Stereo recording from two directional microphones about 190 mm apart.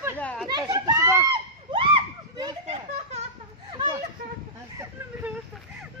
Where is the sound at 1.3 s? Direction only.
30° right (ahead or behind).